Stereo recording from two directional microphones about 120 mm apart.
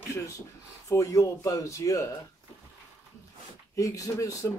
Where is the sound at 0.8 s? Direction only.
25° left (ahead or behind).